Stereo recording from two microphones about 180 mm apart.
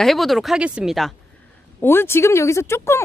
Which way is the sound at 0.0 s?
Centre (ahead or behind).